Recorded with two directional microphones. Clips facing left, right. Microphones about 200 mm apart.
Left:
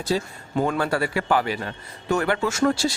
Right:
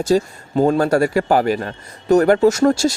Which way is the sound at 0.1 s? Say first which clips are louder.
Right 9 dB; 45° right (ahead or behind).